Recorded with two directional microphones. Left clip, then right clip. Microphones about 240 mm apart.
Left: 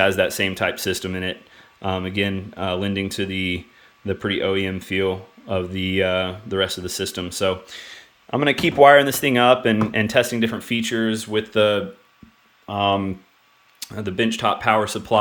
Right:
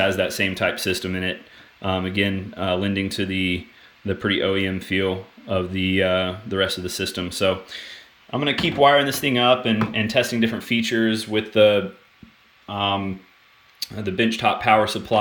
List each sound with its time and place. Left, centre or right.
0.0 s speech: centre
12.6 s speech: centre